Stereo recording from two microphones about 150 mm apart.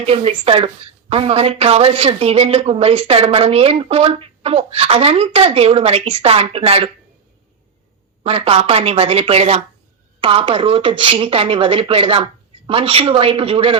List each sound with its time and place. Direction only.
0.0 s a woman's voice: 40° right (ahead or behind)
8.2 s a woman's voice: 40° right (ahead or behind)